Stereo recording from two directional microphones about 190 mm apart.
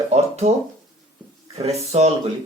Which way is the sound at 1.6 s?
35° right (ahead or behind).